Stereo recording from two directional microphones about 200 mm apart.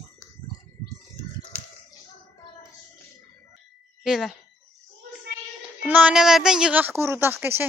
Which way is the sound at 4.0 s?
Centre (ahead or behind).